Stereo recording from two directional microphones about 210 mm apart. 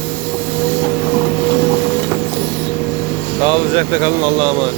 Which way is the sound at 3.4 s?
30° right (ahead or behind).